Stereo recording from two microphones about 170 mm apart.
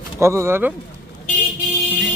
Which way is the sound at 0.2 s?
15° right (ahead or behind).